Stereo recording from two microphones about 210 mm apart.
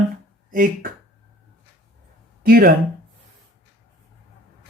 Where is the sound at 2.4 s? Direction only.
45° right (ahead or behind).